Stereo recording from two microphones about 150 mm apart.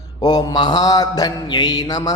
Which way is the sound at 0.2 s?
25° left (ahead or behind).